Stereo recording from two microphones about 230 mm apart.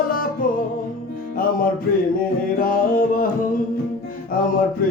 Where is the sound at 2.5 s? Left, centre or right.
Left.